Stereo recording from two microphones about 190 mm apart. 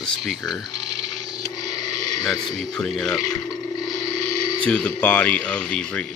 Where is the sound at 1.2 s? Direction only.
20° left (ahead or behind).